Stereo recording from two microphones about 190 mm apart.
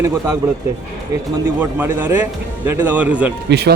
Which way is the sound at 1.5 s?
10° right (ahead or behind).